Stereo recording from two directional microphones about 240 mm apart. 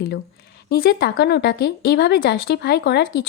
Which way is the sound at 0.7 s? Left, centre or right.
Left.